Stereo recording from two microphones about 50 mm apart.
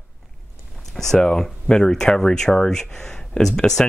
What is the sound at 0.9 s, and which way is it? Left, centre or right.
Speech, centre.